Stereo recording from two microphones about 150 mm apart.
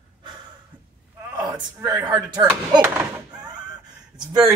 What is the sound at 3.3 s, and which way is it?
Chicken, 5° right (ahead or behind).